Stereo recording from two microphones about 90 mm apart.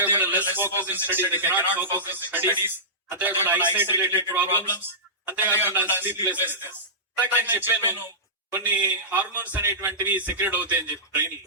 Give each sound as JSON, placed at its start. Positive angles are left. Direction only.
{"t": 0.0, "sound": "speech", "side_deg": -20}